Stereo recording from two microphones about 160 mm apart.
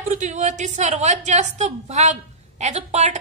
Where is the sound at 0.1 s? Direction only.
45° right (ahead or behind).